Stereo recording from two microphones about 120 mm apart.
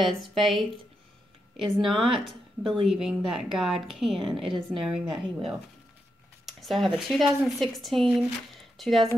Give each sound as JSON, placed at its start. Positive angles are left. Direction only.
{"t": 0.0, "sound": "speech", "side_deg": 0}